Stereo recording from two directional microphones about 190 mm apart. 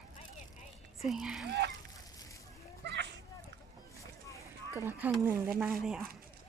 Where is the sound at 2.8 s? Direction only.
65° right (ahead or behind).